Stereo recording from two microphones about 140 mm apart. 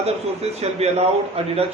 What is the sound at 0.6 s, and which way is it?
Speech, 50° right (ahead or behind).